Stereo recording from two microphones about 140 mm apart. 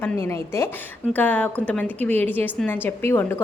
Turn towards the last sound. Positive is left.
turn(degrees=15)  # may be behind; listen again after turning